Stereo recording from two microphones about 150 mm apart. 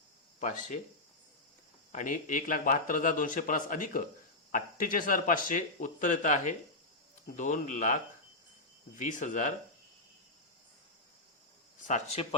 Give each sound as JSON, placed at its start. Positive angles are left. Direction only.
{"t": 0.3, "sound": "speech", "side_deg": 60}
{"t": 1.9, "sound": "speech", "side_deg": 60}
{"t": 9.0, "sound": "speech", "side_deg": 60}
{"t": 11.8, "sound": "speech", "side_deg": 55}